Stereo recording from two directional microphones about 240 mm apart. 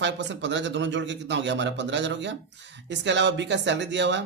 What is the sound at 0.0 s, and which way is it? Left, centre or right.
Speech, right.